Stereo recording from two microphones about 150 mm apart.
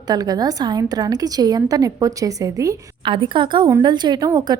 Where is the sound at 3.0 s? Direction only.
35° right (ahead or behind).